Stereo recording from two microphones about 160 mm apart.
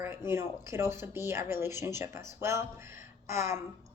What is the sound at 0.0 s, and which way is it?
A woman's voice, 15° right (ahead or behind).